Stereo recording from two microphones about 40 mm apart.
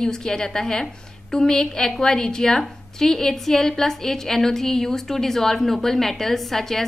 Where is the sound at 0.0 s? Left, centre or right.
Centre.